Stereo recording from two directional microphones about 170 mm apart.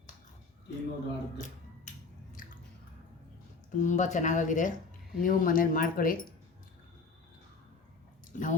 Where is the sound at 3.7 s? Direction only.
45° left (ahead or behind).